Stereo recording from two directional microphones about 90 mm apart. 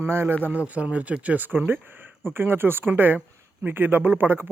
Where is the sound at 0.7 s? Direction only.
15° right (ahead or behind).